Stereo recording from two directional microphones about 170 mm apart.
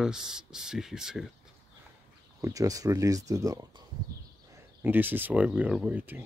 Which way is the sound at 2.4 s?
20° right (ahead or behind).